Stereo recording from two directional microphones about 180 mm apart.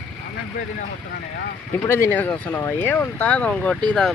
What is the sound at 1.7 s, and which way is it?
Speech, 10° left (ahead or behind).